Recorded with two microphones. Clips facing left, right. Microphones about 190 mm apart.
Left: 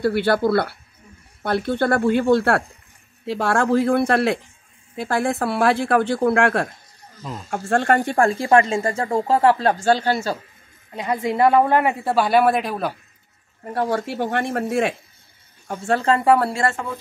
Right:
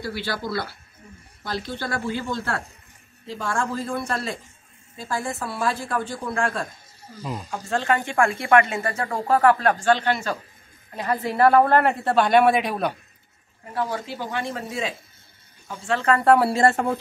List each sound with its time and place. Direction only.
0.0 s a woman's voice: 60° left (ahead or behind)
7.2 s speech: 10° right (ahead or behind)
7.4 s speech: 50° left (ahead or behind); by 10.3 s 30° left (ahead or behind)
11.0 s a woman's voice: 20° left (ahead or behind); by 12.9 s centre (ahead or behind)
13.7 s speech: 50° left (ahead or behind)
16.8 s speech: 55° right (ahead or behind)